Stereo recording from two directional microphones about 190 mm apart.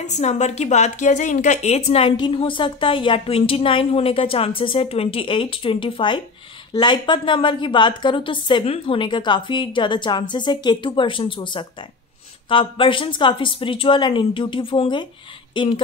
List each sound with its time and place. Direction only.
0.0 s a woman's voice: 35° left (ahead or behind)